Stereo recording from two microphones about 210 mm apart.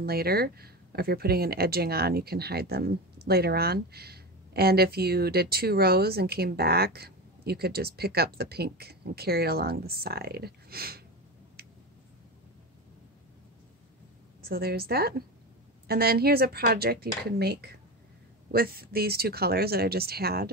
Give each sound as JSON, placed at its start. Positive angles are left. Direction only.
{"t": 0.0, "sound": "speech", "side_deg": -45}
{"t": 14.4, "sound": "speech", "side_deg": -45}